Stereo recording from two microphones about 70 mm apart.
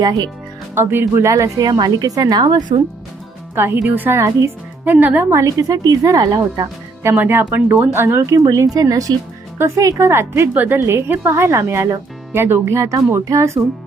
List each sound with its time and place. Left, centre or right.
0.8 s speech: right
1.1 s speech: right
1.6 s a woman's voice: right
3.5 s speech: right
5.3 s a woman's voice: right
7.0 s speech: right
8.4 s a woman's voice: right
10.1 s speech: right
10.5 s speech: right
10.8 s speech: right